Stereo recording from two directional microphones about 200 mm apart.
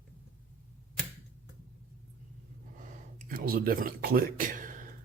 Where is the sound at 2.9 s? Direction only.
40° right (ahead or behind).